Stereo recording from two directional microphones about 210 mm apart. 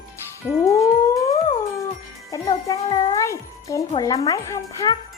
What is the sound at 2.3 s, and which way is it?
Music, 20° left (ahead or behind).